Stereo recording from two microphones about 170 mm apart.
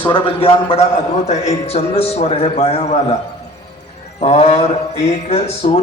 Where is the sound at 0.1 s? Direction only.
30° left (ahead or behind).